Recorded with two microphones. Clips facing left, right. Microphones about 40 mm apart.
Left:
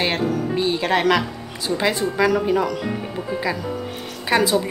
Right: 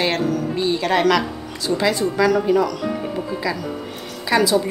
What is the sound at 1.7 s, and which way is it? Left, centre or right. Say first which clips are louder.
A woman's voice: right 2 dB; left.